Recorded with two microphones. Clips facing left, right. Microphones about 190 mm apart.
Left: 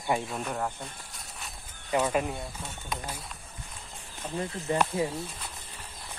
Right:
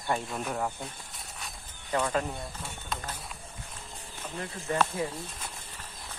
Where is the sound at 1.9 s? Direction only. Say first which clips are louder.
Left 2 dB; 15° left (ahead or behind).